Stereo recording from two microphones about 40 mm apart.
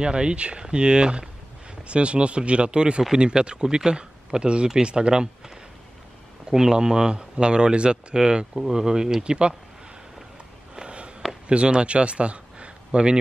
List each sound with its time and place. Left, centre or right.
0.0 s speech: right
10.8 s walk: right
11.4 s a man's voice: right